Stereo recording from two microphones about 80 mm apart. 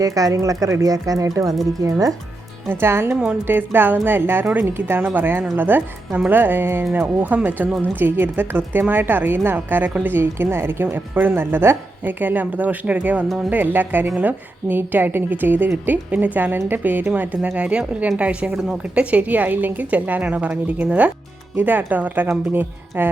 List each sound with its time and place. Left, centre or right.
0.0 s speech: right
2.6 s a woman's voice: right
13.2 s speech: centre
13.5 s a woman's voice: right